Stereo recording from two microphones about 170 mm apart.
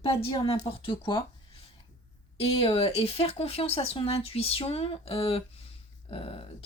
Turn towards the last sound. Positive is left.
turn(degrees=35)  # may be behind; listen again after turning